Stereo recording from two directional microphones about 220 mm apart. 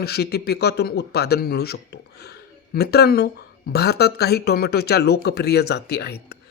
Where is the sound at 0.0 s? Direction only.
45° left (ahead or behind).